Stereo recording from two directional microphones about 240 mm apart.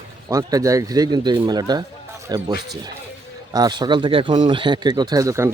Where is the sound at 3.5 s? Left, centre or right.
Centre.